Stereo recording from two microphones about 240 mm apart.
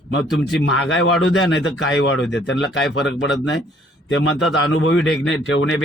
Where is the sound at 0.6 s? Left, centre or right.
Left.